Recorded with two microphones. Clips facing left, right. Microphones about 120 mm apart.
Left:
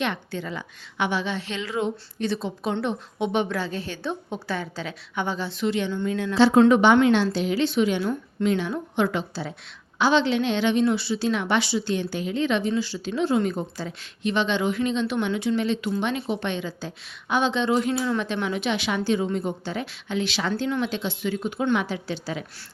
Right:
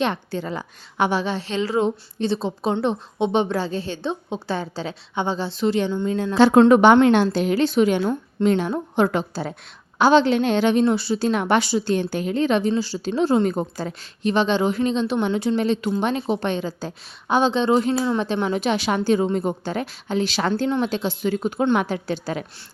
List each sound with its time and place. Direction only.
0.0 s a woman's voice: 35° right (ahead or behind)
6.3 s a woman's voice: 50° right (ahead or behind)
21.8 s a woman's voice: 50° right (ahead or behind)